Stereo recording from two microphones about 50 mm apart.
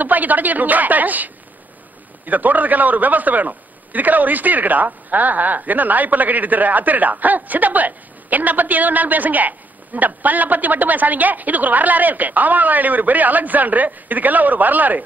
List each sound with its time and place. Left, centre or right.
0.0 s a man's voice: right